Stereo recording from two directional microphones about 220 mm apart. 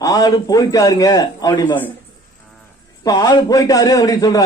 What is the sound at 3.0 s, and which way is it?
A man's voice, 15° left (ahead or behind).